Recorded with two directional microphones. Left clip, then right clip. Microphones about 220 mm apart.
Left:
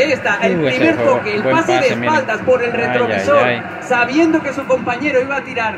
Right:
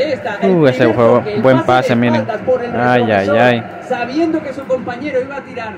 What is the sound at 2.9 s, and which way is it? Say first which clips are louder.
Speech: right 1 dB; 35° right (ahead or behind).